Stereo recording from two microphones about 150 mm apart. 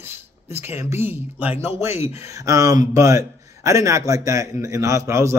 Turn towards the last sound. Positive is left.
turn(degrees=-20)  # may be behind; listen again after turning